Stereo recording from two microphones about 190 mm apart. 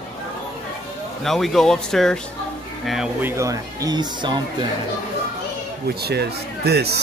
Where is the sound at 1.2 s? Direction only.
Centre (ahead or behind); by 4.6 s 25° right (ahead or behind).